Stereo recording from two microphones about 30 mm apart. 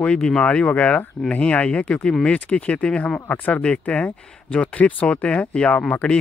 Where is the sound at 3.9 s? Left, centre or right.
Left.